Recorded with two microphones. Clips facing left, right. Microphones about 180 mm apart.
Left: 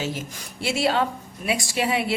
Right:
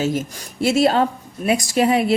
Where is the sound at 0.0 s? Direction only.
45° right (ahead or behind).